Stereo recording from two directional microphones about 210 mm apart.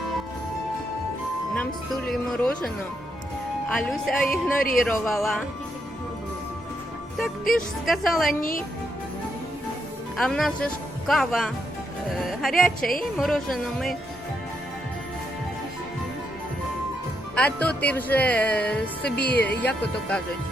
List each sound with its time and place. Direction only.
1.5 s speech: centre (ahead or behind)
7.5 s speech: centre (ahead or behind)
8.3 s a woman's voice: 40° left (ahead or behind)
10.2 s speech: centre (ahead or behind)
17.3 s speech: 5° left (ahead or behind)